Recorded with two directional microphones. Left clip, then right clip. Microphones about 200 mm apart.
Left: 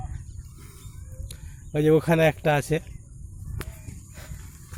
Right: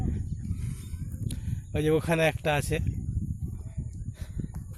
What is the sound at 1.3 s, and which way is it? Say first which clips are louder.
Speech: left 5 dB; centre (ahead or behind).